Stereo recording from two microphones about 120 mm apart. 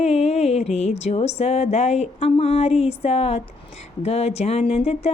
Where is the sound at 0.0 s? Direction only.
60° left (ahead or behind).